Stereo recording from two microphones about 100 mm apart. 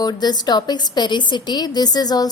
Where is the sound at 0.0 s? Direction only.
45° left (ahead or behind).